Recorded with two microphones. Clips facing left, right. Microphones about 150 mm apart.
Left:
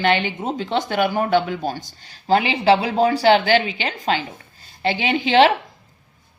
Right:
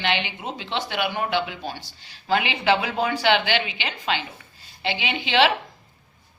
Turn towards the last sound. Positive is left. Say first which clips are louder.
# left 6 dB
turn(degrees=45)  # may be behind; listen again after turning